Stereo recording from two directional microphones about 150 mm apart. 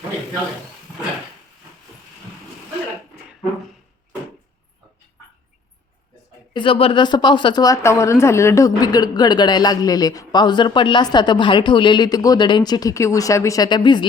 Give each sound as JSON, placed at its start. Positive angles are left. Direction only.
{"t": 6.5, "sound": "speech", "side_deg": 35}